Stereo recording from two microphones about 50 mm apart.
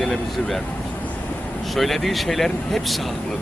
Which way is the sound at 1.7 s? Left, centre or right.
Centre.